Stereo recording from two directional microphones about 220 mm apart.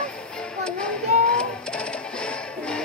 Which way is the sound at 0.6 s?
5° left (ahead or behind).